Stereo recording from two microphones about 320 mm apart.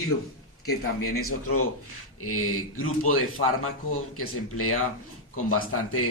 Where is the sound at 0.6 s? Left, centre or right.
Left.